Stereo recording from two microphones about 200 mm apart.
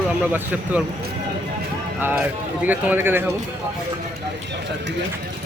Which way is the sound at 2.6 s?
10° right (ahead or behind).